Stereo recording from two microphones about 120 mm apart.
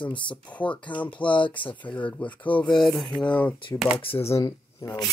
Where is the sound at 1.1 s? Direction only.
45° left (ahead or behind).